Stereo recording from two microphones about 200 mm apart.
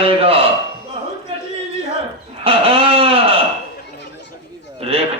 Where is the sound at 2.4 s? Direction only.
30° right (ahead or behind).